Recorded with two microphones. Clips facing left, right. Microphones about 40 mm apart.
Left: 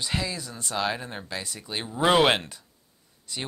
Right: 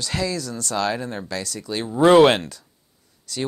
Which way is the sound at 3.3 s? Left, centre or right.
Left.